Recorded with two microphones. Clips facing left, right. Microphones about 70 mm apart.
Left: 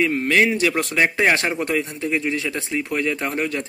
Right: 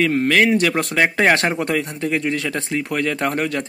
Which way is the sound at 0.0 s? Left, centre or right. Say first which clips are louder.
Right 2 dB; right.